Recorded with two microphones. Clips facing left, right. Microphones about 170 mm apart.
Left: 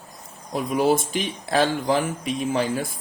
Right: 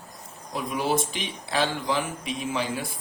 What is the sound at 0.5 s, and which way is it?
Speech, 45° left (ahead or behind).